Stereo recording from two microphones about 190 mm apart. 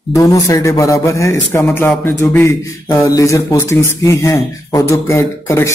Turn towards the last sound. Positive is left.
turn(degrees=15)  # may be behind; listen again after turning